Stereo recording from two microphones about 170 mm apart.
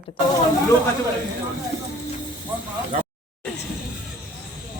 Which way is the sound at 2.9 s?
45° right (ahead or behind).